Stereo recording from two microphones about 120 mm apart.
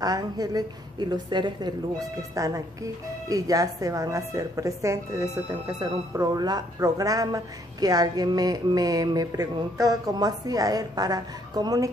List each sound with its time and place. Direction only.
0.0 s a woman's voice: 30° right (ahead or behind)